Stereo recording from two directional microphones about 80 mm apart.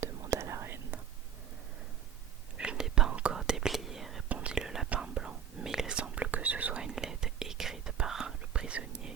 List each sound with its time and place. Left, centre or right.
0.0 s whispering: right
2.6 s whispering: centre
4.3 s whispering: centre
6.8 s whispering: centre